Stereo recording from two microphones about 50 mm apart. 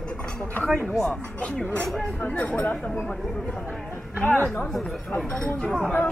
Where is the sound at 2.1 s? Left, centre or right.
Left.